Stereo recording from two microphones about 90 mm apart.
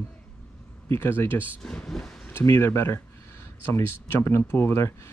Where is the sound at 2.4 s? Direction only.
30° left (ahead or behind).